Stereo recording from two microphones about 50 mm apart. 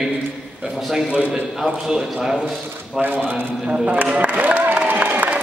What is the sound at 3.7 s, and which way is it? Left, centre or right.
Speech, right.